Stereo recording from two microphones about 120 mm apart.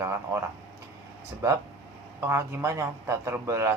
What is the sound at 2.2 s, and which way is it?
Speech, 20° right (ahead or behind).